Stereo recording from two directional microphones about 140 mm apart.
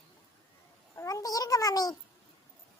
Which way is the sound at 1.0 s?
25° left (ahead or behind).